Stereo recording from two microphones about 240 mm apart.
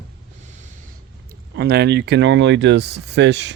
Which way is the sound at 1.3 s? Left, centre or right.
Right.